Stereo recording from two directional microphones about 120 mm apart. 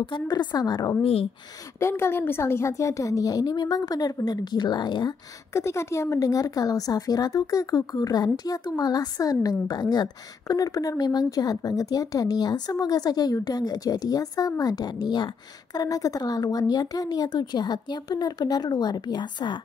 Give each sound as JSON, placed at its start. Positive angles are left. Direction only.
{"t": 0.0, "sound": "speech", "side_deg": 40}
{"t": 1.8, "sound": "speech", "side_deg": 20}
{"t": 5.5, "sound": "speech", "side_deg": 25}